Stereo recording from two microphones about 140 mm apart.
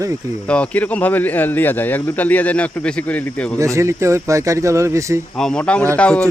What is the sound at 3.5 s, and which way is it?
Speech, 20° right (ahead or behind).